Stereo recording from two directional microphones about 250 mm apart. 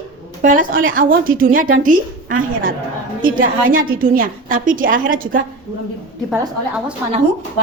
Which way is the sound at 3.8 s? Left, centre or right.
Right.